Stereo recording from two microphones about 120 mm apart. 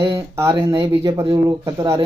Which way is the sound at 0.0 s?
25° right (ahead or behind).